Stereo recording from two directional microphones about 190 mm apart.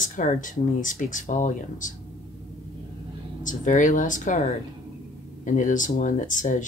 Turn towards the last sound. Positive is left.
turn(degrees=45)  # may be behind; listen again after turning